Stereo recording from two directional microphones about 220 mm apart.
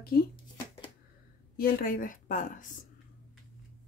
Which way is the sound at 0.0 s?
45° left (ahead or behind).